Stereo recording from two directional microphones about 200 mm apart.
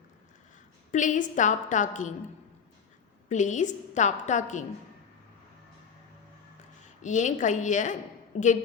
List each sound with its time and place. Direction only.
0.9 s a woman's voice: 40° left (ahead or behind)
3.2 s a woman's voice: 35° left (ahead or behind)
7.0 s a woman's voice: 35° left (ahead or behind)